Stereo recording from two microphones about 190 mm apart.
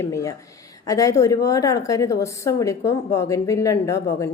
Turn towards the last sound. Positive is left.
turn(degrees=15)  # may be behind; listen again after turning